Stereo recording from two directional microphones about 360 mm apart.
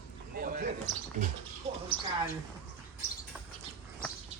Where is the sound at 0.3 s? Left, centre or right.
Right.